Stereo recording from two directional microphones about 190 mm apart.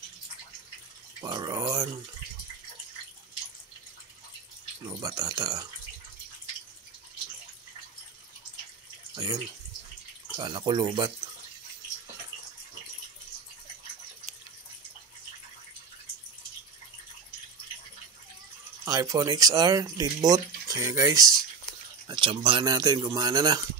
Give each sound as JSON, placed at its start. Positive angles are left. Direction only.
{"t": 1.2, "sound": "speech", "side_deg": -20}
{"t": 4.8, "sound": "speech", "side_deg": -20}
{"t": 9.1, "sound": "speech", "side_deg": -20}
{"t": 18.9, "sound": "speech", "side_deg": -15}